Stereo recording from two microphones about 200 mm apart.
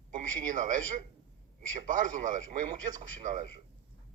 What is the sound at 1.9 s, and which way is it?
Speech, 40° right (ahead or behind).